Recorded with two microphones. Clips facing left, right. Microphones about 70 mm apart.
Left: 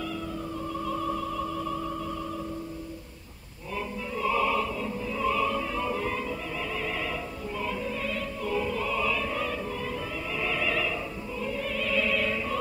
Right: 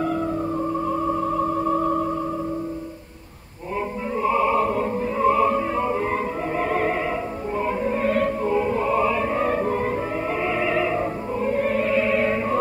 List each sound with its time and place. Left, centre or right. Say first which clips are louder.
0.8 s music: right 7 dB; right
4.2 s opera: right 6 dB; right
4.6 s music: right 9 dB; right
8.5 s opera: right 8 dB; right
10.4 s opera: right 5 dB; right
11.0 s opera: right 10 dB; right